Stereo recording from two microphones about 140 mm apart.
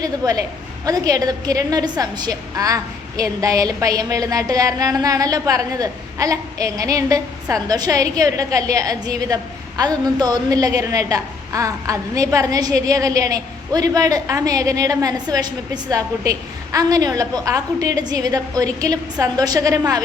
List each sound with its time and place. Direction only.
0.0 s a woman's voice: 25° right (ahead or behind)